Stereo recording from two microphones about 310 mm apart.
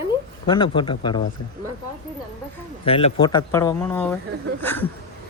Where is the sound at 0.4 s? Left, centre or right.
Centre.